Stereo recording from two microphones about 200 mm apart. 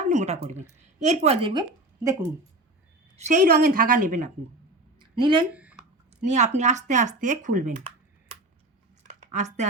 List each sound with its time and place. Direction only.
0.0 s a sound: 35° right (ahead or behind)
0.9 s speech: 35° right (ahead or behind)
3.2 s speech: 40° right (ahead or behind)
4.9 s a sound: 25° right (ahead or behind)
6.2 s speech: 35° right (ahead or behind)
9.3 s speech: 35° right (ahead or behind)